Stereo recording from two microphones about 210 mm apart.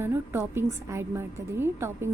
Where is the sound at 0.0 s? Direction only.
10° right (ahead or behind).